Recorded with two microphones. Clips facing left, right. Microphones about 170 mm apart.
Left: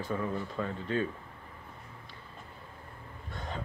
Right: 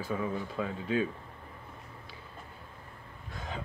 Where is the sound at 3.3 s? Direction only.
Centre (ahead or behind).